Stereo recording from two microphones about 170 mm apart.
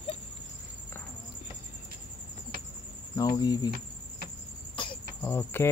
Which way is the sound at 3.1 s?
25° left (ahead or behind).